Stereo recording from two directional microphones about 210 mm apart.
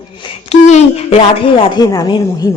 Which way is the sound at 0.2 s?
30° left (ahead or behind).